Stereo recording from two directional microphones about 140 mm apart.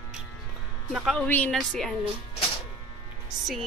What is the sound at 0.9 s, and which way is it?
Speech, centre (ahead or behind).